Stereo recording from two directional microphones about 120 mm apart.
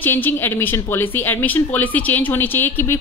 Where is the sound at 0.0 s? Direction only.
15° left (ahead or behind).